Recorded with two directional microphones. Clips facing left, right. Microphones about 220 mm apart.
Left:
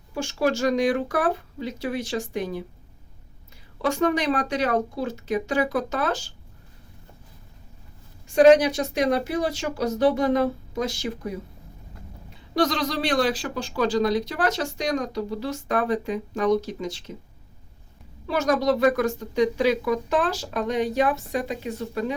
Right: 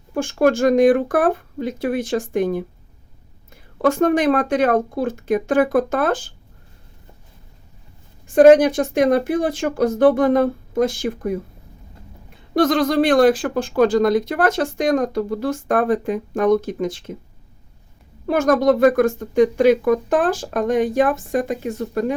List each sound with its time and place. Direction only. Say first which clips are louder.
0.1 s speech: right 7 dB; 50° right (ahead or behind)
3.8 s speech: right 6 dB; 50° right (ahead or behind)
8.3 s speech: right 5 dB; 50° right (ahead or behind)
12.5 s speech: right 8 dB; 50° right (ahead or behind)
18.3 s speech: right 6 dB; 50° right (ahead or behind)